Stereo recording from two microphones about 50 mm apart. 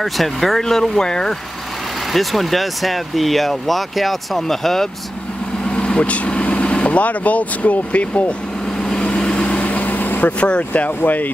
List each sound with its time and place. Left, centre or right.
0.0 s speech: centre
2.1 s speech: centre
5.7 s speech: left
8.8 s vehicle: centre; by 10.3 s left
10.4 s speech: left